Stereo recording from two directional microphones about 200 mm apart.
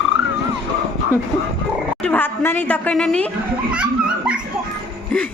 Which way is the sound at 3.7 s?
5° right (ahead or behind).